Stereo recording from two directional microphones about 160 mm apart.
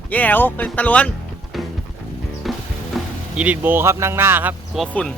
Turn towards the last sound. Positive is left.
turn(degrees=5)  # may be behind; listen again after turning